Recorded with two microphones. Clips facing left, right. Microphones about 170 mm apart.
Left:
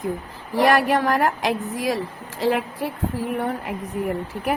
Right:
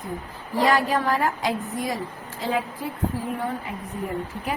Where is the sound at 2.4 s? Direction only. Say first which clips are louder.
Left 5 dB; 80° left.